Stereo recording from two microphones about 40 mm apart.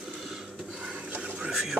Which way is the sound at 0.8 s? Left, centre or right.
Centre.